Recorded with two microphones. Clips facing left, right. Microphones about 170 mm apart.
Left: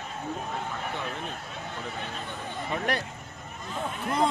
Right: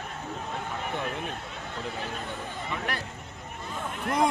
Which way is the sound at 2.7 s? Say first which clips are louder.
Left 5 dB; 20° left (ahead or behind).